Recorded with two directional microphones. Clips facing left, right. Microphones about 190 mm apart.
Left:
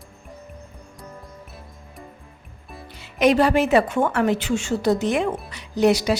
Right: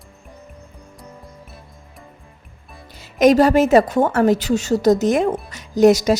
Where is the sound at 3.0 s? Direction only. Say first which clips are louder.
Right 5 dB; 40° right (ahead or behind).